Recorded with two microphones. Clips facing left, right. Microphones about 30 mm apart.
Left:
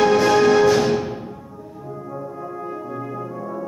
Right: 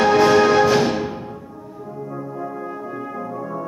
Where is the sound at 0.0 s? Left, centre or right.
Centre.